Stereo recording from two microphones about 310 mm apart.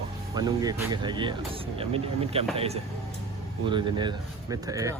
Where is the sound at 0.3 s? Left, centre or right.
Centre.